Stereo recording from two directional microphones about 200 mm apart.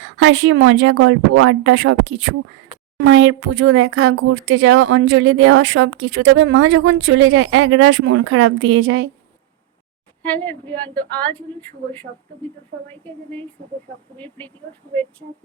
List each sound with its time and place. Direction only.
0.0 s speech: 75° right (ahead or behind)
10.2 s a woman's voice: 10° left (ahead or behind)
12.9 s a woman's voice: 5° left (ahead or behind)